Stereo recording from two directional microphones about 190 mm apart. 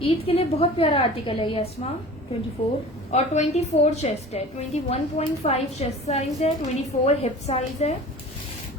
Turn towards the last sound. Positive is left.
turn(degrees=35)  # may be behind; listen again after turning